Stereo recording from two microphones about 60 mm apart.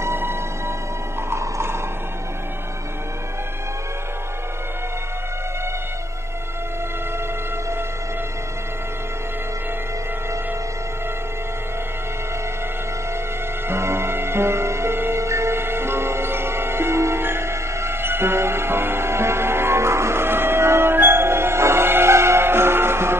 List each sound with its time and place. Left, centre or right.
0.0 s music: right
1.3 s a sound: right
13.7 s music: right